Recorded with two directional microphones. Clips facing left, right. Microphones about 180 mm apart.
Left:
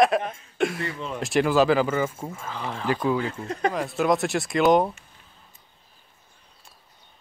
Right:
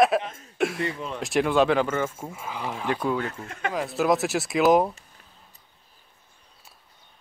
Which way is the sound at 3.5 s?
35° left (ahead or behind).